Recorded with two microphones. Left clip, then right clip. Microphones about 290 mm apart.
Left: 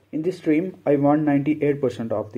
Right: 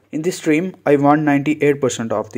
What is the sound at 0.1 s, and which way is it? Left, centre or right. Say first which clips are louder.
Speech: right 4 dB; right.